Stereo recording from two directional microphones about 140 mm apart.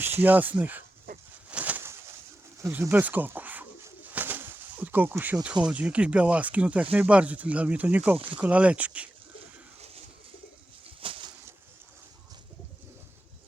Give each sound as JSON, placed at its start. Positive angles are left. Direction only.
{"t": 0.2, "sound": "speech", "side_deg": -10}
{"t": 1.5, "sound": "bird", "side_deg": -10}
{"t": 5.6, "sound": "speech", "side_deg": -10}
{"t": 11.0, "sound": "a sound", "side_deg": -40}